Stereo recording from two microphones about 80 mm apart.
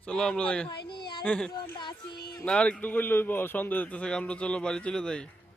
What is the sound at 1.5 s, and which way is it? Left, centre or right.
Speech, left.